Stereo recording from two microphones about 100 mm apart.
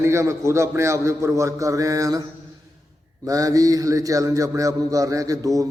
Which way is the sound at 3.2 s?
35° right (ahead or behind).